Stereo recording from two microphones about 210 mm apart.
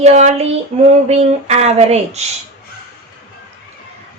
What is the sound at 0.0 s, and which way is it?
Speech, 30° right (ahead or behind).